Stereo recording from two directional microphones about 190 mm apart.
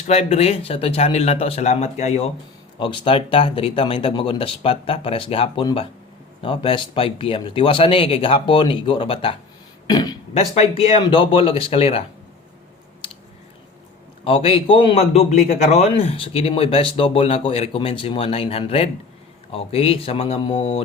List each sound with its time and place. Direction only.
0.1 s a man's voice: 35° left (ahead or behind)
10.3 s a man's voice: 35° left (ahead or behind)
14.3 s a man's voice: 30° left (ahead or behind)